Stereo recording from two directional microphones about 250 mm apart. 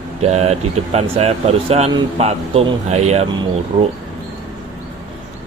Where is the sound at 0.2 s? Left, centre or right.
Right.